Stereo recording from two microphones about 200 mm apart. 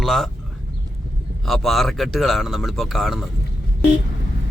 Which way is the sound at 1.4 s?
Centre (ahead or behind).